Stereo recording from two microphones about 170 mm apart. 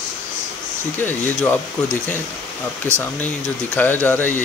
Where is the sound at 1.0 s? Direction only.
10° left (ahead or behind).